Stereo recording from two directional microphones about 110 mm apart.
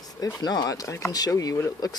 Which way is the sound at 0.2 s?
35° left (ahead or behind).